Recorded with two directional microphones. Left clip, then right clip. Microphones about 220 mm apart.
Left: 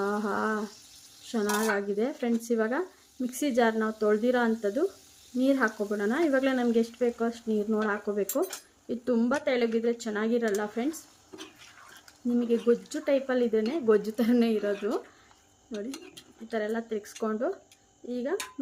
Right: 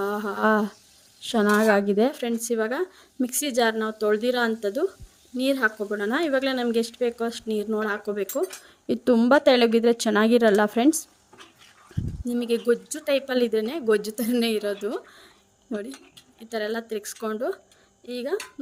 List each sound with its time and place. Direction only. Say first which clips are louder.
0.0 s humming: right 5 dB; 45° right (ahead or behind)
1.2 s speech: right 8 dB; 45° right (ahead or behind)
12.3 s speech: right 2 dB; 45° right (ahead or behind)
16.5 s speech: right 3 dB; 45° right (ahead or behind)